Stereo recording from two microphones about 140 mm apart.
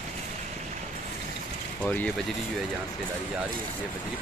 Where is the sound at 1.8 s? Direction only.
15° left (ahead or behind).